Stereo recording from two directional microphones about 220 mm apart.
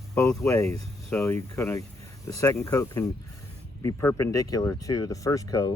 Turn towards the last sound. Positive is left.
turn(degrees=15)  # may be behind; listen again after turning